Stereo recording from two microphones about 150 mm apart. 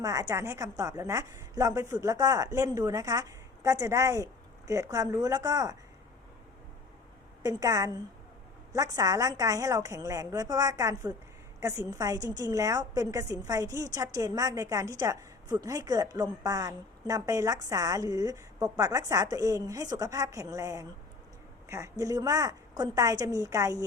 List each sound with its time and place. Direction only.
0.0 s a woman's voice: 20° right (ahead or behind)
7.4 s a woman's voice: 25° right (ahead or behind)